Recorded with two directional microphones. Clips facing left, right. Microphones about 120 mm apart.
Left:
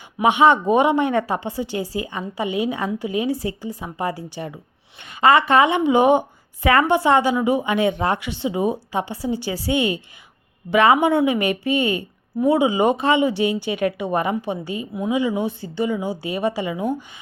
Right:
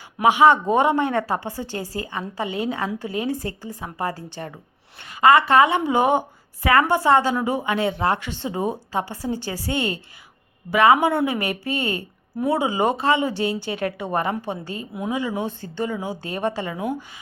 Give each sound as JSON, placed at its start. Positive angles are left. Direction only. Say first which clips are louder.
{"t": 0.2, "sound": "a woman's voice", "louder": "even", "side_deg": 20}
{"t": 16.0, "sound": "a woman's voice", "louder": "left 3 dB", "side_deg": -15}
{"t": 16.2, "sound": "speech", "louder": "left 1 dB", "side_deg": 10}